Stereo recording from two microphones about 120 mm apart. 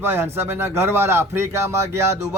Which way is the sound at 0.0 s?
20° right (ahead or behind).